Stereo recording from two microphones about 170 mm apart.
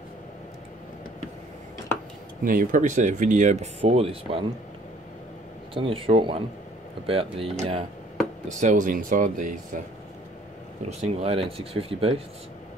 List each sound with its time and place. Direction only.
2.4 s speech: 55° right (ahead or behind)
3.8 s speech: 35° right (ahead or behind)
5.8 s speech: 30° right (ahead or behind)
8.5 s speech: 45° right (ahead or behind)
10.9 s speech: 40° right (ahead or behind)